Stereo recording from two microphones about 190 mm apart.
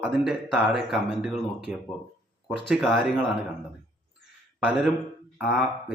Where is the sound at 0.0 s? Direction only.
5° right (ahead or behind).